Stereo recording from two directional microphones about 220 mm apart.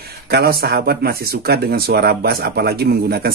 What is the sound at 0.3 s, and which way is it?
Speech, 45° right (ahead or behind).